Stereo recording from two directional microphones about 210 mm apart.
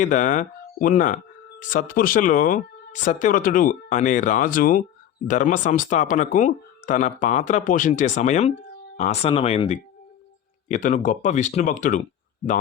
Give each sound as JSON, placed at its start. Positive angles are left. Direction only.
{"t": 0.0, "sound": "speech", "side_deg": 35}